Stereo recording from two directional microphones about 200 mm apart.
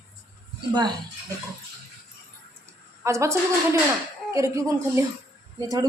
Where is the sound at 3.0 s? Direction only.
15° right (ahead or behind).